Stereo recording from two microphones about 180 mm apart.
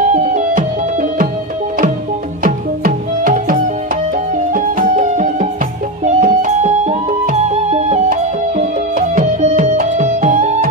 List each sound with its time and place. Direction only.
0.1 s music: 40° right (ahead or behind)
2.4 s music: 50° right (ahead or behind)
8.1 s music: 50° right (ahead or behind)